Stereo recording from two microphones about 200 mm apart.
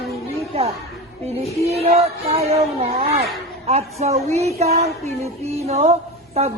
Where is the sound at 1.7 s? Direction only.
30° right (ahead or behind).